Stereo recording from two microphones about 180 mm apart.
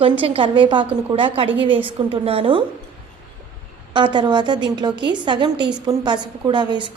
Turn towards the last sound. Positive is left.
turn(degrees=-25)  # may be behind; listen again after turning